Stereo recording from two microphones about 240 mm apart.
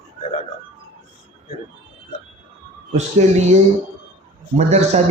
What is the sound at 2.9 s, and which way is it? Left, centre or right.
Speech, right.